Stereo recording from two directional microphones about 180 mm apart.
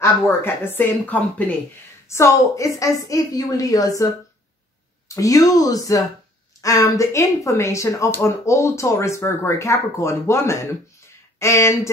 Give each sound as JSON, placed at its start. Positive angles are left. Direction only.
{"t": 0.0, "sound": "speech", "side_deg": 10}
{"t": 5.0, "sound": "speech", "side_deg": 20}